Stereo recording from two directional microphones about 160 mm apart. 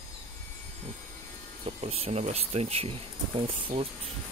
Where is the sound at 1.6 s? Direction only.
40° right (ahead or behind).